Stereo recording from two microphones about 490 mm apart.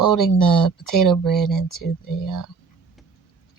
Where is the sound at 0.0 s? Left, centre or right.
Left.